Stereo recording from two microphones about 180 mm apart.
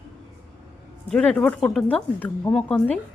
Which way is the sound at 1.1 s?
5° left (ahead or behind).